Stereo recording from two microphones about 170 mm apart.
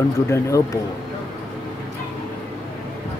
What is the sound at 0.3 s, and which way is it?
Speech, 20° left (ahead or behind).